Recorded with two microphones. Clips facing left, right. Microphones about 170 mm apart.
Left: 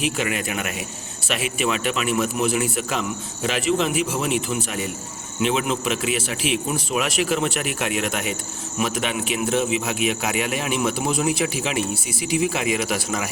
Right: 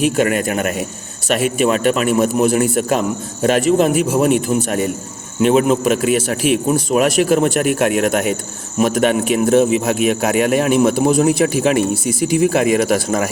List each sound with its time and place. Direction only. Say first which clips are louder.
0.0 s speech: right 9 dB; 45° right (ahead or behind)